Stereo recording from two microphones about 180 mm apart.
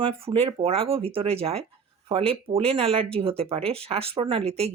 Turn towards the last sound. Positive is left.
turn(degrees=-35)  # may be behind; listen again after turning